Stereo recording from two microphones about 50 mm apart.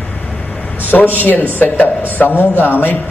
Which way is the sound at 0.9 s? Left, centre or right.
Left.